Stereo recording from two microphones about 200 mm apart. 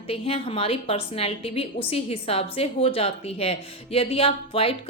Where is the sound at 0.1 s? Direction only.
30° left (ahead or behind).